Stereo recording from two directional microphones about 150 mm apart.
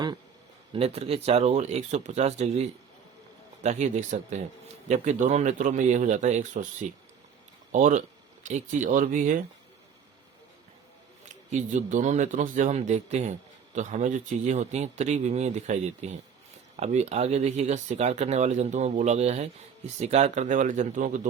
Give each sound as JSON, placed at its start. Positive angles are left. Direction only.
{"t": 0.7, "sound": "speech", "side_deg": -40}
{"t": 11.5, "sound": "speech", "side_deg": -55}